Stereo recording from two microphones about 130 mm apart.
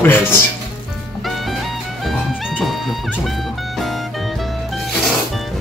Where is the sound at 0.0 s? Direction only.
15° left (ahead or behind).